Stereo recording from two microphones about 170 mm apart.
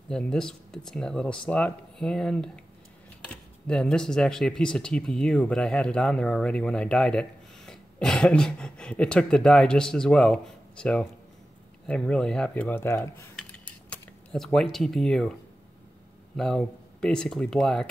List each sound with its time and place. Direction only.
0.1 s speech: 5° left (ahead or behind)
3.6 s speech: 5° left (ahead or behind)
13.4 s a sound: 10° left (ahead or behind)
16.3 s speech: 5° left (ahead or behind)